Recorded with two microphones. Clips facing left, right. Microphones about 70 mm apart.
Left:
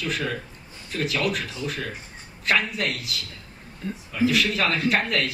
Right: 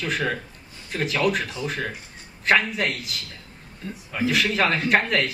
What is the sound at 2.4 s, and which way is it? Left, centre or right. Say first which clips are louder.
Speech: right 3 dB; right.